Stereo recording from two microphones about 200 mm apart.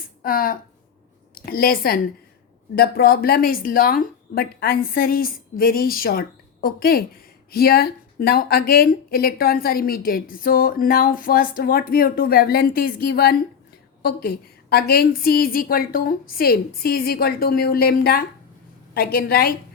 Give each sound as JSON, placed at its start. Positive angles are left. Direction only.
{"t": 0.2, "sound": "a woman's voice", "side_deg": 45}